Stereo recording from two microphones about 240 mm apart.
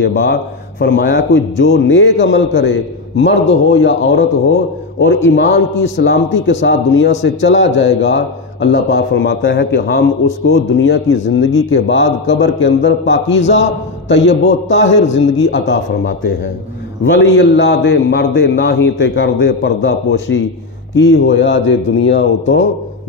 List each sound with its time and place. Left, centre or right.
0.0 s a man's voice: left
5.0 s a man's voice: left